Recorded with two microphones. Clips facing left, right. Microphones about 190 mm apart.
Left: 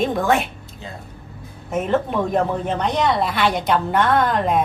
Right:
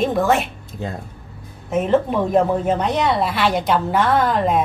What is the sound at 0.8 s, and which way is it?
Speech, 55° right (ahead or behind).